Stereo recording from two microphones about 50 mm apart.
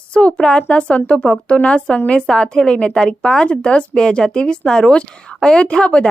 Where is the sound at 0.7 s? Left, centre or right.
Left.